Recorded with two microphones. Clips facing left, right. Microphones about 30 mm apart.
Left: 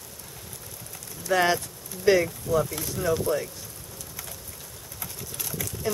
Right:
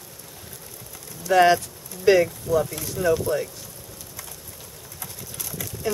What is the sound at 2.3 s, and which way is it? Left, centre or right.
Speech, centre.